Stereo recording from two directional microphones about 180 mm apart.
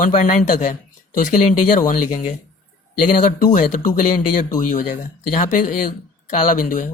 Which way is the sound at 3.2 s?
45° left (ahead or behind).